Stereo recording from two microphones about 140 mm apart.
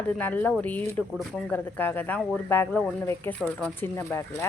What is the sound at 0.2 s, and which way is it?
Speech, 10° left (ahead or behind).